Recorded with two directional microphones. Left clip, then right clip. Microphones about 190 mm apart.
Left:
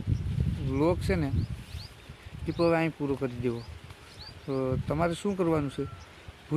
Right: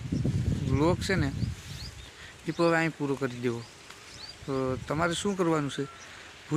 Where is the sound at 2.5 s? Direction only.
Centre (ahead or behind).